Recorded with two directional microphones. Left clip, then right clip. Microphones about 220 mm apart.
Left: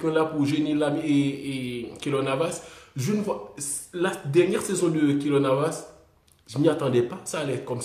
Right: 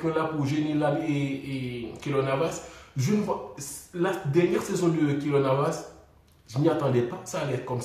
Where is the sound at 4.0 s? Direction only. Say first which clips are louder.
Left 2 dB; 50° left (ahead or behind).